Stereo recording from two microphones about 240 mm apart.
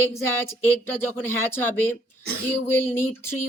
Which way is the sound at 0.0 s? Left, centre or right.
Centre.